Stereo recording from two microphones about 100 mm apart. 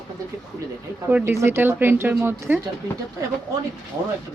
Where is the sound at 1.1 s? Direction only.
25° right (ahead or behind).